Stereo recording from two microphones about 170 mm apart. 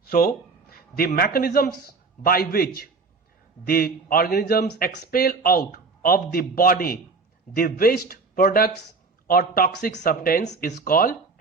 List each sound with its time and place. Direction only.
0.0 s a man's voice: 60° left (ahead or behind)